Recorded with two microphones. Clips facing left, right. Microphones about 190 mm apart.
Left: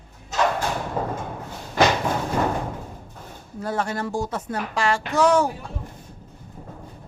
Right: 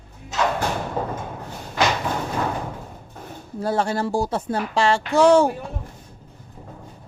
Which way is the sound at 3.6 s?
30° right (ahead or behind).